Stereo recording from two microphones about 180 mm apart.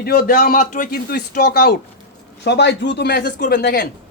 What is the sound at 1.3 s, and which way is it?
Speech, 60° left (ahead or behind).